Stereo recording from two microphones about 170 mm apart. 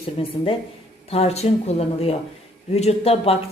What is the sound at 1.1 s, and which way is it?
Speech, 40° left (ahead or behind).